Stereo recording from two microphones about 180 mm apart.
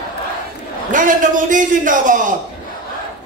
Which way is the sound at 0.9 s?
45° right (ahead or behind).